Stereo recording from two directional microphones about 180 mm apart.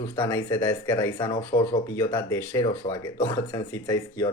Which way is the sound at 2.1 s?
15° left (ahead or behind).